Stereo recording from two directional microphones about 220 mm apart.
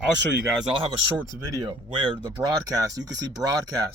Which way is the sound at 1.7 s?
20° right (ahead or behind).